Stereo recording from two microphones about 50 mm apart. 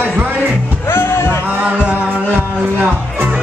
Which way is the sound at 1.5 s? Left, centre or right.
Right.